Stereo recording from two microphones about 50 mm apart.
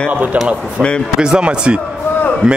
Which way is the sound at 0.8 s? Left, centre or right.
Centre.